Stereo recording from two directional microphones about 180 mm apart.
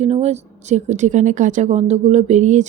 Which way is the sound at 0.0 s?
35° right (ahead or behind).